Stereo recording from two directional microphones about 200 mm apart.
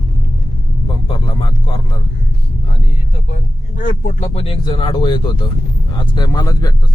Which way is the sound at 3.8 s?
40° left (ahead or behind).